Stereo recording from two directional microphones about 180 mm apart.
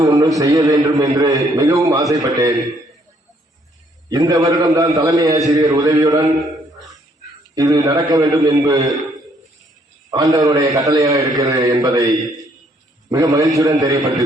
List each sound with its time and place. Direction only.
0.0 s a man's voice: 20° right (ahead or behind)
4.1 s a man's voice: 20° right (ahead or behind)
7.5 s a man's voice: 20° right (ahead or behind)
10.1 s a man's voice: 20° right (ahead or behind)
13.1 s a man's voice: 20° right (ahead or behind)